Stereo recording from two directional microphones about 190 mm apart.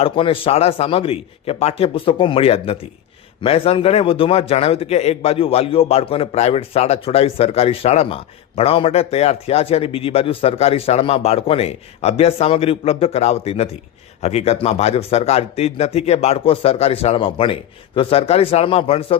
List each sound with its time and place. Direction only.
0.0 s a man's voice: 30° left (ahead or behind)